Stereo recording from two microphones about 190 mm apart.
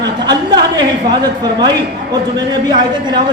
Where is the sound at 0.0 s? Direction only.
20° right (ahead or behind).